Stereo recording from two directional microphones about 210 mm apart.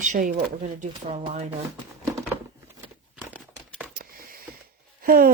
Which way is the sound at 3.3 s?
5° right (ahead or behind).